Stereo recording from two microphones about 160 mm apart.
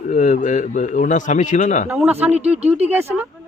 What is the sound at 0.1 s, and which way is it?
Speech, 50° left (ahead or behind).